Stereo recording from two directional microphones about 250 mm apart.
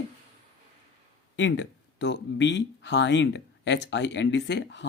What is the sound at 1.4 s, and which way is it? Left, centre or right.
Speech, left.